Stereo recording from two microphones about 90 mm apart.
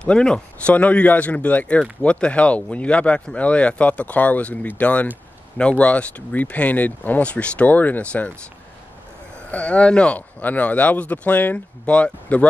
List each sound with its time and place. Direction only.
0.0 s speech: 10° left (ahead or behind)
9.5 s speech: 15° left (ahead or behind)